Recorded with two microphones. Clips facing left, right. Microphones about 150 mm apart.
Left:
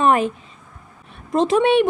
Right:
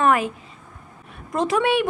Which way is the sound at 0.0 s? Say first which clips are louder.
Left 2 dB; 25° left (ahead or behind).